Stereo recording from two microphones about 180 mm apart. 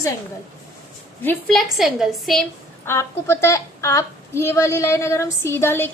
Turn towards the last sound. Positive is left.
turn(degrees=15)  # may be behind; listen again after turning